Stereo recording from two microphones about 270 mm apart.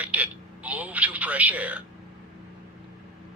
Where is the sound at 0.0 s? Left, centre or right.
Centre.